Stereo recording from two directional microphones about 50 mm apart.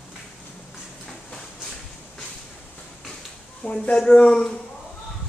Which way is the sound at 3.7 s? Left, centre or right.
Centre.